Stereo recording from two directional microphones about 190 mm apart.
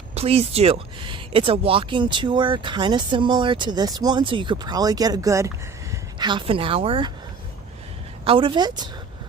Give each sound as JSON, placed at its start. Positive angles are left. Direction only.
{"t": 0.1, "sound": "speech", "side_deg": -35}
{"t": 8.2, "sound": "speech", "side_deg": -30}